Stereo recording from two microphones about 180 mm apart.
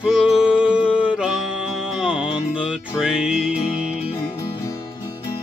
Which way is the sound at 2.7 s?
5° right (ahead or behind).